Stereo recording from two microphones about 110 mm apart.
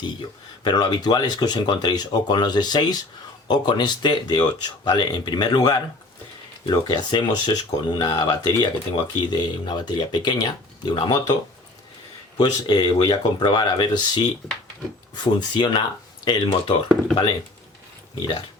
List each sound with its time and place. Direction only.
0.6 s speech: 40° left (ahead or behind)
12.4 s speech: 45° left (ahead or behind)
18.1 s speech: 45° left (ahead or behind)